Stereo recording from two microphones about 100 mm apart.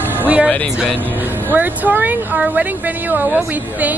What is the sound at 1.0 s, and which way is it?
Speech, 20° right (ahead or behind).